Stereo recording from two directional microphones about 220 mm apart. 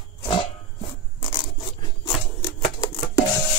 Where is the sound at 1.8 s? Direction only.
20° left (ahead or behind).